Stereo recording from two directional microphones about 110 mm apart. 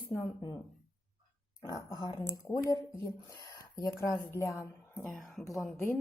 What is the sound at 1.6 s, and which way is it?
A woman's voice, 30° left (ahead or behind).